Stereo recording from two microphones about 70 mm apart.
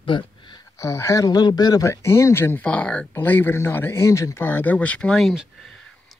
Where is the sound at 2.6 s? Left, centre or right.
Centre.